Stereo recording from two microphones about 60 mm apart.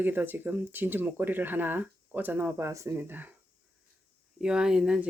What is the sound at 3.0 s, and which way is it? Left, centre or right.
Speech, right.